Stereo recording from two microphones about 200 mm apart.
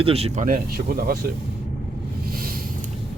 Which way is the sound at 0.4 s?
45° right (ahead or behind).